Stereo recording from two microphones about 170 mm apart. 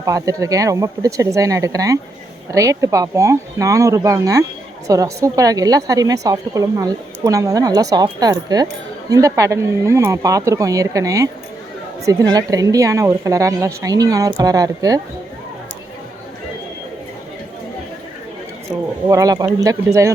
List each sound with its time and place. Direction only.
0.0 s a woman's voice: 20° right (ahead or behind)
19.0 s a woman's voice: 20° right (ahead or behind)